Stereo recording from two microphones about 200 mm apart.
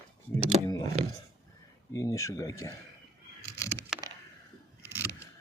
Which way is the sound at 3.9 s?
5° right (ahead or behind).